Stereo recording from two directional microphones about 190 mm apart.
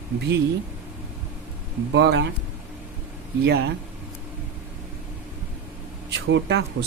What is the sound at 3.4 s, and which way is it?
Speech, 65° right (ahead or behind).